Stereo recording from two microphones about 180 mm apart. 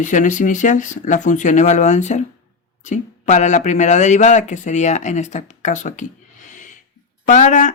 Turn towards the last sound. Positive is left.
turn(degrees=45)  # may be behind; listen again after turning